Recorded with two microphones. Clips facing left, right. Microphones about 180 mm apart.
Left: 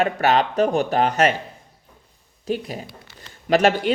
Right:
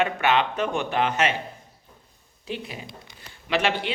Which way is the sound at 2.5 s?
40° left (ahead or behind).